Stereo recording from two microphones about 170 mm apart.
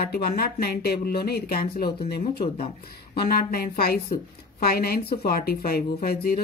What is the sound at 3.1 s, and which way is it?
Speech, 65° left (ahead or behind).